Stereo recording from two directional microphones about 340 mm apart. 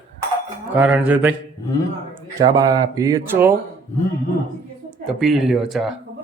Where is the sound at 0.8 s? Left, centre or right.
Centre.